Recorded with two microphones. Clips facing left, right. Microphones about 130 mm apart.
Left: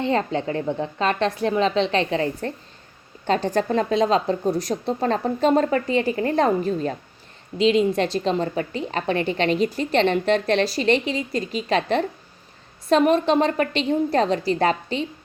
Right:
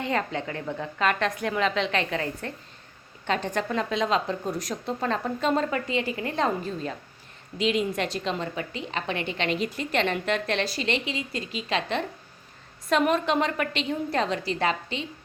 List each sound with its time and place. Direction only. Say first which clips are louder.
0.0 s a woman's voice: left 6 dB; 30° left (ahead or behind); by 6.9 s 45° left (ahead or behind)
7.6 s a woman's voice: left 7 dB; 30° left (ahead or behind)